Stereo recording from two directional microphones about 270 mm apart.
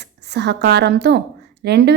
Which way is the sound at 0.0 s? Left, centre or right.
Right.